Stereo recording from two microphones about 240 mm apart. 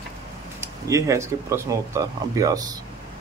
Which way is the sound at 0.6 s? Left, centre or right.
Centre.